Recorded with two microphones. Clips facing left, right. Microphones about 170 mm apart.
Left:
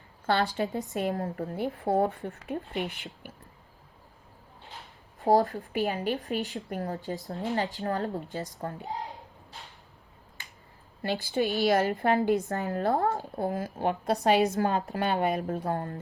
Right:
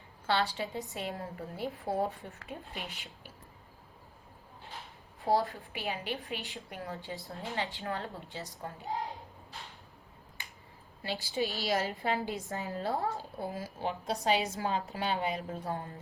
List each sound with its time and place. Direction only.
0.3 s a woman's voice: 45° left (ahead or behind)
5.2 s speech: 40° left (ahead or behind)
11.0 s a woman's voice: 50° left (ahead or behind)